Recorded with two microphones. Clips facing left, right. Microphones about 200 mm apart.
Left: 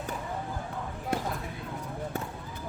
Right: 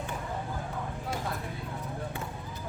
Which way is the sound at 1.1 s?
60° left (ahead or behind).